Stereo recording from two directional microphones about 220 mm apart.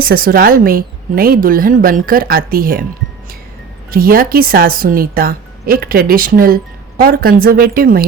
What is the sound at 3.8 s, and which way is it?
Speech, 40° right (ahead or behind).